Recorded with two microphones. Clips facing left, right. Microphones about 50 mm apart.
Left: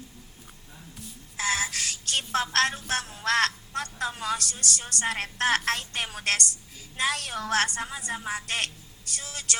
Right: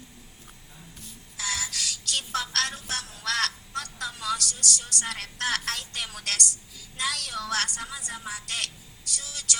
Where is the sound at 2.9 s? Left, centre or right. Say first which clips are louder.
Left 5 dB; left.